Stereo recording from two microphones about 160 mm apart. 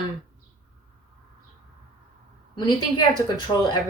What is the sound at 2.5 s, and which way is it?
Speech, 25° left (ahead or behind).